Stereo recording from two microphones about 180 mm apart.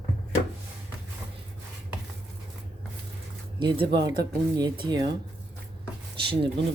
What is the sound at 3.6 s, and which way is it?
Speech, 25° right (ahead or behind).